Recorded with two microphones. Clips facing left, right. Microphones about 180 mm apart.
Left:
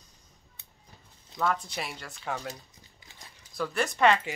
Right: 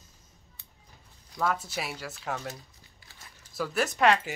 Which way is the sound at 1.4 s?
5° right (ahead or behind).